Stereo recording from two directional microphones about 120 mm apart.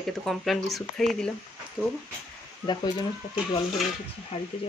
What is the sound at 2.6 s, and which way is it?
Speech, 40° left (ahead or behind).